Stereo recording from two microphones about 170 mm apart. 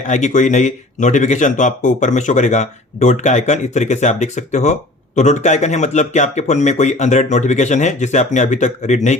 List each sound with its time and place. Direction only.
0.1 s speech: 45° left (ahead or behind)